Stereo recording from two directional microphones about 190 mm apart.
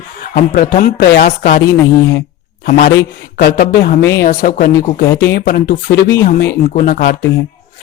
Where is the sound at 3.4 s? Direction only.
55° left (ahead or behind).